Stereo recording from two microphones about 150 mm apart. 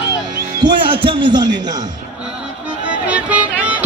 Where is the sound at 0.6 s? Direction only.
35° right (ahead or behind).